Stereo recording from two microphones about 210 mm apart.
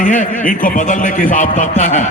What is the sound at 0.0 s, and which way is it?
A man's voice, 35° left (ahead or behind).